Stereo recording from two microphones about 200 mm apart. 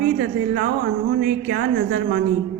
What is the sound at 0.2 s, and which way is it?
A woman's voice, 55° right (ahead or behind).